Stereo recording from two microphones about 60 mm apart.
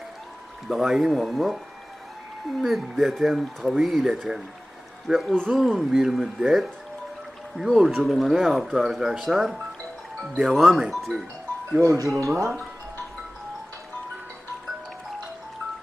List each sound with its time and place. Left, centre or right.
0.7 s speech: centre
2.6 s speech: centre
11.8 s speech: right